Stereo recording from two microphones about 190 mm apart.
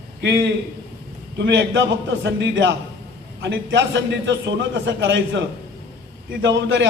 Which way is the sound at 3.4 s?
70° right (ahead or behind).